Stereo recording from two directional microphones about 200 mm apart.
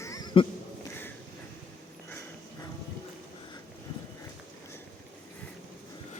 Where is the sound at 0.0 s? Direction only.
20° left (ahead or behind).